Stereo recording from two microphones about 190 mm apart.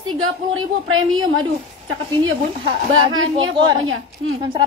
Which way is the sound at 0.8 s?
90° right.